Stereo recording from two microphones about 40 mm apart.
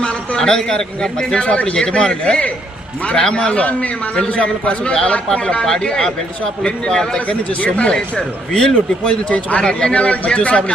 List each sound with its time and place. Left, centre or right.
0.0 s a sound: left
0.3 s a man's voice: centre
1.4 s speech: left
5.6 s a man's voice: centre
7.3 s speech: left